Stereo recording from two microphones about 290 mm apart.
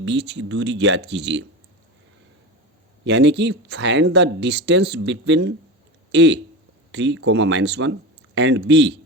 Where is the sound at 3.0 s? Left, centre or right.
Right.